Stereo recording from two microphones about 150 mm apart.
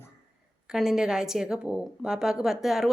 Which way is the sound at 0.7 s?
5° right (ahead or behind).